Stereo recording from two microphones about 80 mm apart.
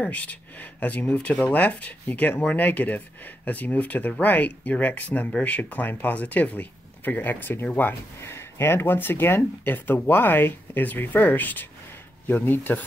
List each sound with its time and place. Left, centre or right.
0.0 s speech: centre